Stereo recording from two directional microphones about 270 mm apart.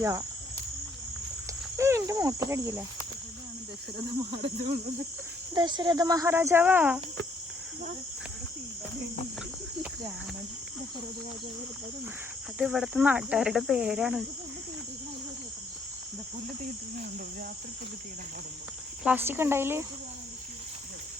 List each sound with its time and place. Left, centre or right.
0.0 s speech: centre
1.7 s cricket: centre
3.9 s cricket: centre
5.5 s speech: centre
12.5 s speech: centre
19.0 s speech: centre